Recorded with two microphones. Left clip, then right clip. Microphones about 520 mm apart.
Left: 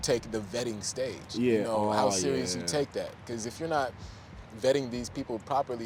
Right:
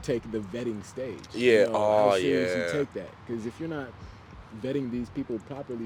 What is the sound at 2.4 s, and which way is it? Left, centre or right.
Speech, left.